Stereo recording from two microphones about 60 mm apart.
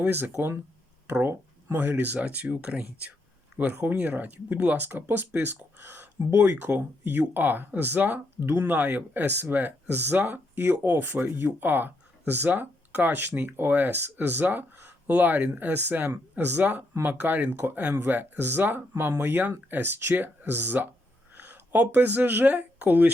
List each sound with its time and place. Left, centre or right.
0.0 s speech: right